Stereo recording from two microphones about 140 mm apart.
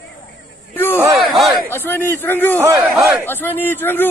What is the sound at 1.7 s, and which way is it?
Speech, 15° left (ahead or behind).